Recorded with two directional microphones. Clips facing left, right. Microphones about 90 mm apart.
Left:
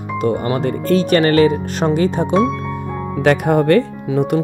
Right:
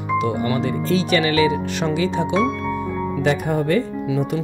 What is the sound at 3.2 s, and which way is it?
Speech, 65° left (ahead or behind).